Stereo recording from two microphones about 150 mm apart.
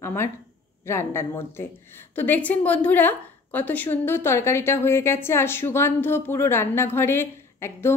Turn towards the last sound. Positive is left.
turn(degrees=15)  # may be behind; listen again after turning